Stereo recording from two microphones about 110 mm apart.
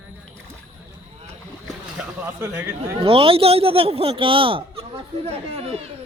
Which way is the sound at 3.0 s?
55° right (ahead or behind).